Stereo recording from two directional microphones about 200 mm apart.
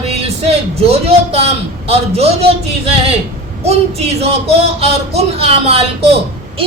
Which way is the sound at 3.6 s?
30° right (ahead or behind).